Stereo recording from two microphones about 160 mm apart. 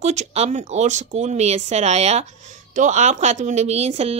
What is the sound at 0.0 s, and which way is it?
A woman's voice, 45° right (ahead or behind).